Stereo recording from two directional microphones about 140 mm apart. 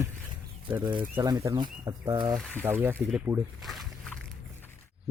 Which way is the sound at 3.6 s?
Centre (ahead or behind).